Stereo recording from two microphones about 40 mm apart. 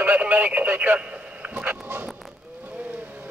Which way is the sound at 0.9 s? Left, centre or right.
Right.